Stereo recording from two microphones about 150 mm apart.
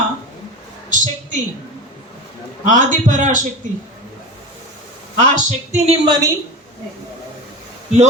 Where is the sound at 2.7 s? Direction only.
60° right (ahead or behind).